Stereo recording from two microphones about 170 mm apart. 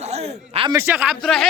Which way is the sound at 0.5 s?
30° right (ahead or behind).